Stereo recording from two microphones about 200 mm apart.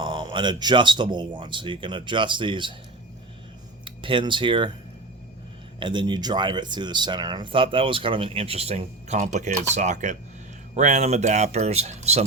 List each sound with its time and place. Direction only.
0.0 s speech: 25° right (ahead or behind)
3.8 s speech: 25° right (ahead or behind)
5.8 s speech: 20° right (ahead or behind)